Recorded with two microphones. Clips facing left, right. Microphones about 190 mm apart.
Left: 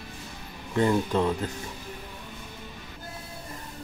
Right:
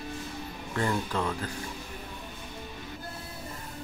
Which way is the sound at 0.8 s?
20° left (ahead or behind).